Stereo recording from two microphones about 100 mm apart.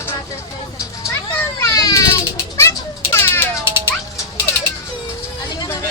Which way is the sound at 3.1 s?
25° left (ahead or behind).